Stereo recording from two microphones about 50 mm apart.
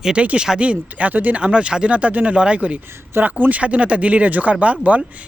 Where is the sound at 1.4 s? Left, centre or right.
Right.